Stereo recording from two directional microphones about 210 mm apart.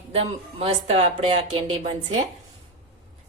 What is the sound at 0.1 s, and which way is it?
Speech, 30° right (ahead or behind).